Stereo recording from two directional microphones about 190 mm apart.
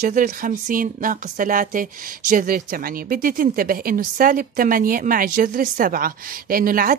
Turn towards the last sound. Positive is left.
turn(degrees=-50)  # may be behind; listen again after turning